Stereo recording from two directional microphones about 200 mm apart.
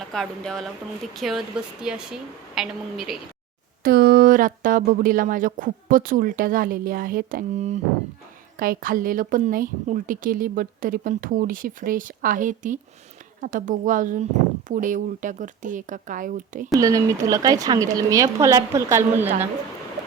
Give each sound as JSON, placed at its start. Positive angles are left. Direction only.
{"t": 0.1, "sound": "speech", "side_deg": 5}
{"t": 3.8, "sound": "a woman's voice", "side_deg": -50}
{"t": 16.7, "sound": "a woman's voice", "side_deg": -15}